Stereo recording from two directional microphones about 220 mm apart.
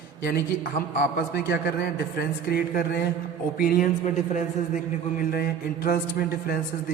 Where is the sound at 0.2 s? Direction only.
45° left (ahead or behind).